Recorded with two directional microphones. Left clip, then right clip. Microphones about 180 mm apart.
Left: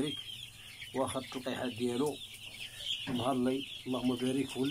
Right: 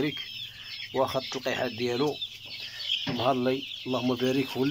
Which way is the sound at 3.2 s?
20° right (ahead or behind).